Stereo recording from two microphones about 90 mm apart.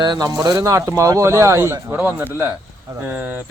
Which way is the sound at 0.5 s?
35° right (ahead or behind).